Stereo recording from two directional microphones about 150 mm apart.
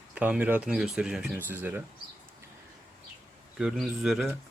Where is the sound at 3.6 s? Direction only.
Centre (ahead or behind).